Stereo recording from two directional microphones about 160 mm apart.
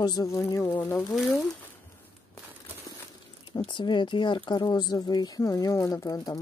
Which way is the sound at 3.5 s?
30° left (ahead or behind).